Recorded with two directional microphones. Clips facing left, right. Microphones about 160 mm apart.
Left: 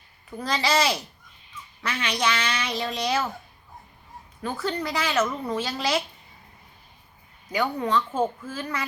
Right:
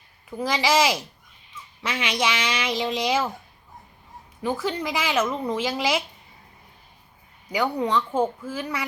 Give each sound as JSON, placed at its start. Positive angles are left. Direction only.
{"t": 0.3, "sound": "a woman's voice", "side_deg": -10}
{"t": 4.4, "sound": "a woman's voice", "side_deg": -15}
{"t": 7.5, "sound": "a woman's voice", "side_deg": -15}